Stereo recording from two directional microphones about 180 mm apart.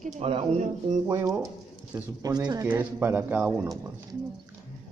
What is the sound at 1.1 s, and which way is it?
Speech, 15° right (ahead or behind).